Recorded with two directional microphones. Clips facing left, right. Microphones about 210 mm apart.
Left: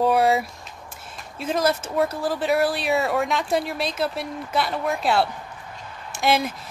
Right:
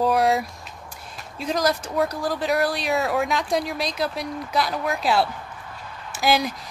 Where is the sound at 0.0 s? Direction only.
Centre (ahead or behind).